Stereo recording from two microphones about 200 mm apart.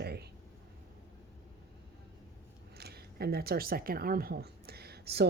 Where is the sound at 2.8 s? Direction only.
50° right (ahead or behind).